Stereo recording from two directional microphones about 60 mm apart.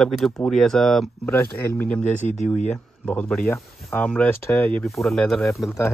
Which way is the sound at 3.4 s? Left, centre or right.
Left.